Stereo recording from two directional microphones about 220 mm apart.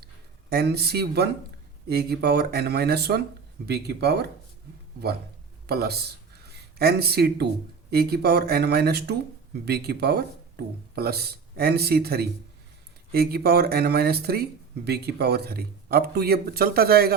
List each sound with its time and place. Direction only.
0.5 s speech: 45° right (ahead or behind)
5.6 s speech: 45° right (ahead or behind)